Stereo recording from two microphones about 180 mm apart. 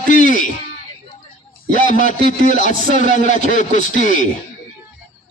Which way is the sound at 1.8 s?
45° left (ahead or behind).